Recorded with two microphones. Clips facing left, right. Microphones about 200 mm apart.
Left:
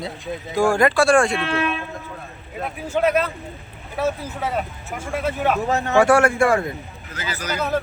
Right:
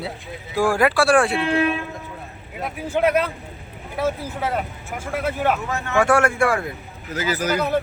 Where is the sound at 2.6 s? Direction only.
10° right (ahead or behind).